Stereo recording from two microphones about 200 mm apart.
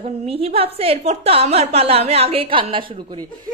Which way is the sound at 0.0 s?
30° right (ahead or behind).